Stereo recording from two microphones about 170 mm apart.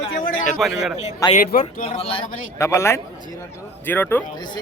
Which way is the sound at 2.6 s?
15° left (ahead or behind).